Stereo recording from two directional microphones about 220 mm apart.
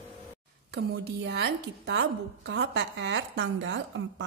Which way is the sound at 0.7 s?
50° right (ahead or behind).